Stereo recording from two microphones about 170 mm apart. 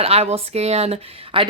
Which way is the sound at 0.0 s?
35° right (ahead or behind).